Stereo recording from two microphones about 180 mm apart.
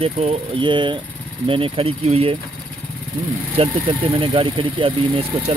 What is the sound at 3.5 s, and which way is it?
Speech, 30° right (ahead or behind).